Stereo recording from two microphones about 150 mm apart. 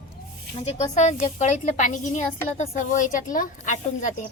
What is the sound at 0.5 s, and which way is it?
A woman's voice, 50° left (ahead or behind).